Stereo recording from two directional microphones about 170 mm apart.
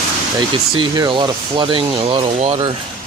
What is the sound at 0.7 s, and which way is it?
Speech, 30° right (ahead or behind).